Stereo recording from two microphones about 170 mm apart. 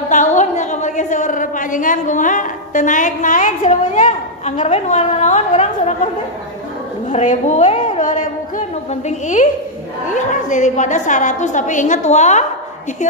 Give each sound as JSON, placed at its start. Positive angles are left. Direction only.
{"t": 0.1, "sound": "a sound", "side_deg": 45}
{"t": 7.1, "sound": "a woman's voice", "side_deg": 45}
{"t": 10.0, "sound": "a woman's voice", "side_deg": 45}